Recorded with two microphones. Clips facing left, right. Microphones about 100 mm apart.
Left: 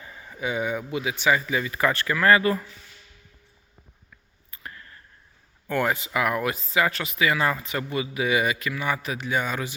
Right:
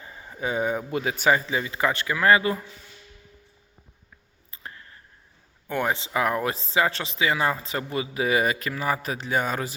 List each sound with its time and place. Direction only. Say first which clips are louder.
0.0 s speech: even; 30° right (ahead or behind)
4.1 s a sound: even; 30° right (ahead or behind)
5.6 s speech: left 1 dB; 15° right (ahead or behind); by 9.7 s 40° right (ahead or behind)